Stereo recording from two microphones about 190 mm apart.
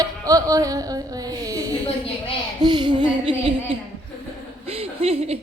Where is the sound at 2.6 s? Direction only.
25° right (ahead or behind).